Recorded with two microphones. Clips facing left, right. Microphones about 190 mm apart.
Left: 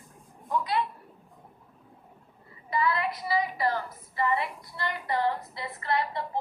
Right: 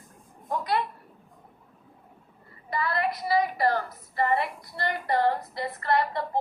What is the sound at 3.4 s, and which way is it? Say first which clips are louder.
A woman's voice: right 3 dB; 60° right (ahead or behind).